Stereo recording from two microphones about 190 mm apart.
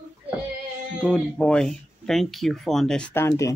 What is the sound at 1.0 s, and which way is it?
Speech, 5° left (ahead or behind).